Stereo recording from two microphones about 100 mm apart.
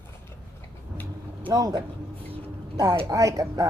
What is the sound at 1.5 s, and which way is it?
Speech, 40° right (ahead or behind).